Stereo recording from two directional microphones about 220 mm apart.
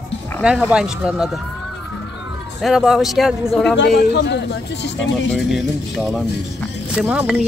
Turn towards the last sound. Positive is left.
turn(degrees=-5)  # may be behind; listen again after turning